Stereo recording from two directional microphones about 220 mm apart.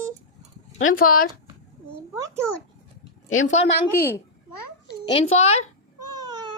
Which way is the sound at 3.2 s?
35° left (ahead or behind).